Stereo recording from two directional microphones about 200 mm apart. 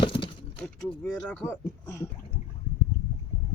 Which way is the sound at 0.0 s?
25° left (ahead or behind).